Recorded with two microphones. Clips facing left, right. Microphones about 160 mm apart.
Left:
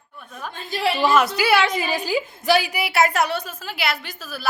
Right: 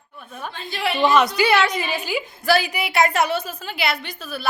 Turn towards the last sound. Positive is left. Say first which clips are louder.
# right 3 dB
turn(degrees=0)  # may be behind; listen again after turning